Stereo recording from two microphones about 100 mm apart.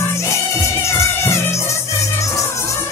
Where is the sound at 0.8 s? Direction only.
25° left (ahead or behind).